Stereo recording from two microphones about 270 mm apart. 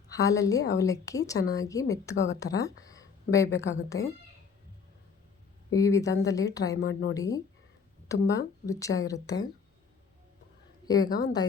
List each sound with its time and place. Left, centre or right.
0.1 s speech: centre
5.7 s speech: centre
6.7 s a woman's voice: left
7.1 s speech: centre
10.8 s speech: centre